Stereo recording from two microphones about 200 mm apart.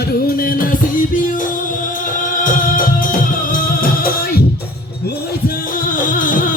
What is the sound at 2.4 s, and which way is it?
Music, 40° left (ahead or behind).